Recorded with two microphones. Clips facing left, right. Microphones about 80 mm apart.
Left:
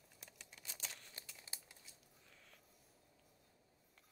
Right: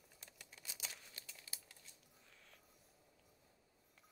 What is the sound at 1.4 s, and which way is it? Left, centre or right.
Crumpling, left.